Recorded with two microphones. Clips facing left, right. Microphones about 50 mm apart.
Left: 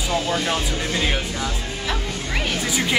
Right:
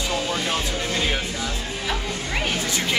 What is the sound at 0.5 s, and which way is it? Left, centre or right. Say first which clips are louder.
Speech: left 2 dB; centre.